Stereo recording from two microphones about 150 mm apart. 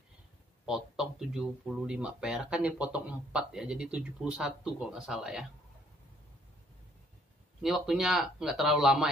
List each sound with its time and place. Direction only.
0.7 s speech: centre (ahead or behind)
7.6 s speech: centre (ahead or behind)